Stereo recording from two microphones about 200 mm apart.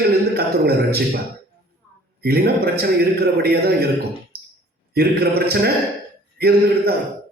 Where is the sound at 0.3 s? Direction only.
50° right (ahead or behind).